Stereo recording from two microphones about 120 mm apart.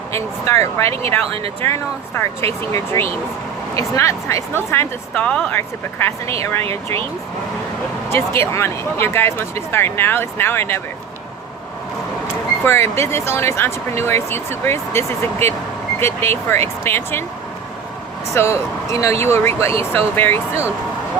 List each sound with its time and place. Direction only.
0.5 s speech: 25° left (ahead or behind)
2.4 s speech: 55° right (ahead or behind)
3.8 s speech: 25° left (ahead or behind)
6.7 s speech: 55° right (ahead or behind)
8.1 s speech: 20° left (ahead or behind)
12.6 s speech: 20° left (ahead or behind)
18.3 s speech: 25° left (ahead or behind)